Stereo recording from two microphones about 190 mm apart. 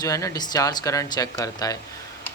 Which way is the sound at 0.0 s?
20° left (ahead or behind).